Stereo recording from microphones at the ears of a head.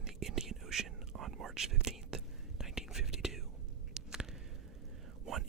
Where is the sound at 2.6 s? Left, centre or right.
Centre.